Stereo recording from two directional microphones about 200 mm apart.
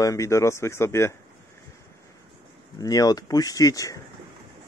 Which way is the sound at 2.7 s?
20° left (ahead or behind).